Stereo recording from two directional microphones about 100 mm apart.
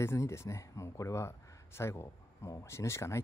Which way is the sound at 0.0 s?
25° left (ahead or behind).